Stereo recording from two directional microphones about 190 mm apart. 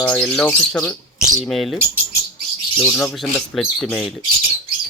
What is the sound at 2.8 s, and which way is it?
Bird, 5° left (ahead or behind).